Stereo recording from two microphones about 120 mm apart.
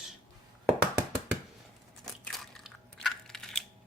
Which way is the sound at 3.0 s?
5° left (ahead or behind).